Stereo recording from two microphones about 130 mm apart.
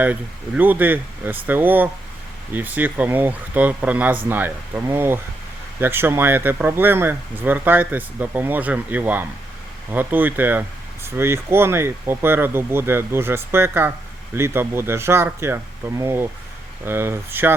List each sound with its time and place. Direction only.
0.0 s speech: 15° right (ahead or behind)